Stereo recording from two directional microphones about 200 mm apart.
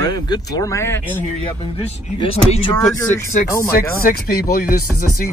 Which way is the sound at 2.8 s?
15° left (ahead or behind).